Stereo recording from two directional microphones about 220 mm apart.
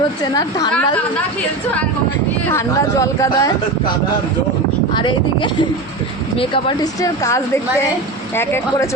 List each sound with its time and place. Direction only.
0.2 s a woman's voice: 20° left (ahead or behind)
2.5 s a woman's voice: 15° left (ahead or behind)
4.9 s a woman's voice: 20° left (ahead or behind)